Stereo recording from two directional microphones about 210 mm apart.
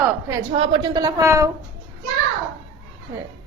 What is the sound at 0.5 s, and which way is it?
Speech, 25° right (ahead or behind).